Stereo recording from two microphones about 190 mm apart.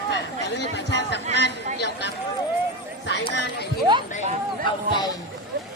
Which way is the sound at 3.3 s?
65° left (ahead or behind).